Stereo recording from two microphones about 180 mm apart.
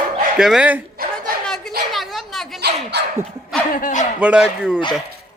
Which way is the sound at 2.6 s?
65° right (ahead or behind).